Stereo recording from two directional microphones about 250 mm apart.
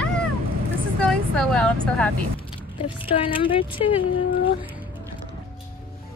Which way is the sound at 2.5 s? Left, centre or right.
Left.